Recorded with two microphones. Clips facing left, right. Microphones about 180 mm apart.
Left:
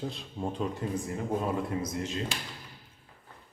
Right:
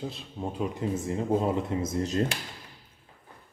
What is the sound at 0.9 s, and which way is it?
Speech, 25° right (ahead or behind).